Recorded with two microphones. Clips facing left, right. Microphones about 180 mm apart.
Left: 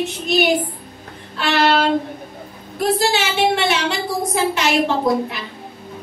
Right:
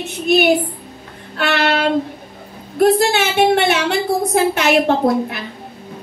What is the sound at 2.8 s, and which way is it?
A woman's voice, 60° right (ahead or behind).